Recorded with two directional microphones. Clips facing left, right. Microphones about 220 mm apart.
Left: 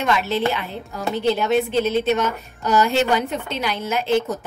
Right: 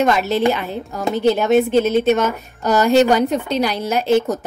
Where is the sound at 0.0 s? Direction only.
45° right (ahead or behind).